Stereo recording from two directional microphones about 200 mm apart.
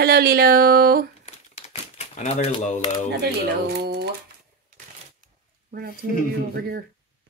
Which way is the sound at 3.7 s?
55° right (ahead or behind).